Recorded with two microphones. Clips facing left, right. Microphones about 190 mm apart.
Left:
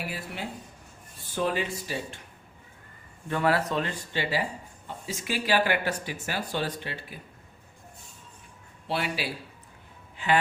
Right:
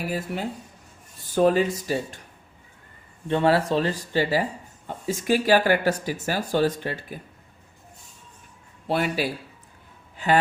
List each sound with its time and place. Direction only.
0.1 s speech: 45° right (ahead or behind)
3.2 s speech: 25° right (ahead or behind); by 7.2 s 45° right (ahead or behind)
8.9 s speech: 45° right (ahead or behind)